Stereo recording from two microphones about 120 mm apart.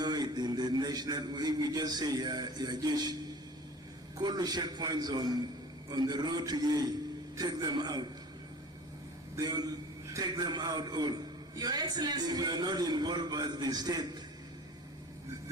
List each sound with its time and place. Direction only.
0.0 s a man's voice: 35° right (ahead or behind)
4.2 s a man's voice: 35° right (ahead or behind)
9.3 s a man's voice: 35° right (ahead or behind)